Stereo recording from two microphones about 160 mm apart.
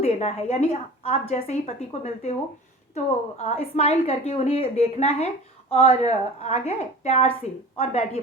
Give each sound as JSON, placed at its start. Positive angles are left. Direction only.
{"t": 0.0, "sound": "a woman's voice", "side_deg": 40}